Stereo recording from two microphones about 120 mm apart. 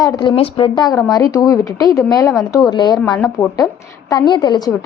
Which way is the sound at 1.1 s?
30° left (ahead or behind).